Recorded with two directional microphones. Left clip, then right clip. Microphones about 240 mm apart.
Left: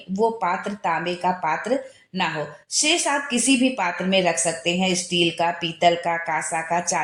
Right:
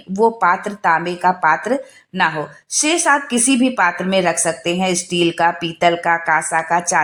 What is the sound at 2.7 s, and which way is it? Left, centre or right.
A woman's voice, centre.